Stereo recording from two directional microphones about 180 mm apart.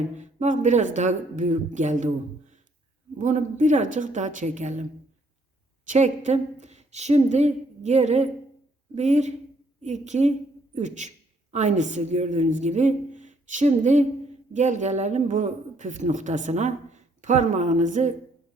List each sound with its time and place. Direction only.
0.2 s a man's voice: 45° right (ahead or behind)
3.2 s a man's voice: 40° right (ahead or behind)